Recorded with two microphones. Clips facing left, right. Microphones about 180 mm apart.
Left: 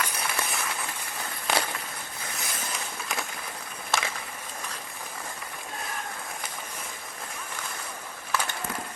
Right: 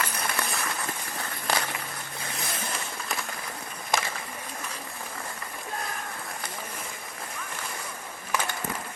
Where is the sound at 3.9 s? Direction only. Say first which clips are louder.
Right 1 dB; 15° right (ahead or behind).